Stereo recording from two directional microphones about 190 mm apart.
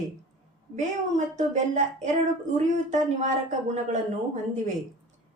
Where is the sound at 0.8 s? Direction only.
40° right (ahead or behind).